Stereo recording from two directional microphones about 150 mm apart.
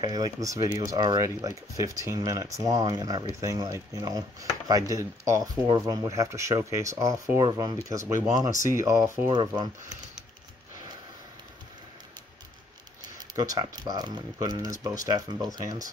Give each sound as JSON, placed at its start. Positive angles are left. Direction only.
{"t": 0.0, "sound": "speech", "side_deg": -25}
{"t": 9.3, "sound": "speech", "side_deg": -35}
{"t": 13.3, "sound": "speech", "side_deg": -25}